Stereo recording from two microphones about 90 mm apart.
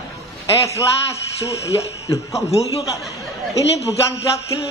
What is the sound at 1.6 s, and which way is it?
Speech, 35° left (ahead or behind).